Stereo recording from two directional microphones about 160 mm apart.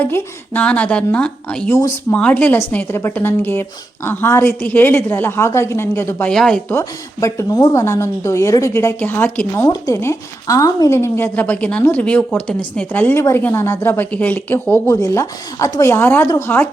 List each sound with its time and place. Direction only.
0.0 s speech: 10° left (ahead or behind)
6.7 s speech: 20° left (ahead or behind)